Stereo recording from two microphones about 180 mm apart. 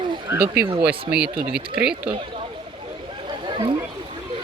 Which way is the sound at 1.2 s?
50° right (ahead or behind).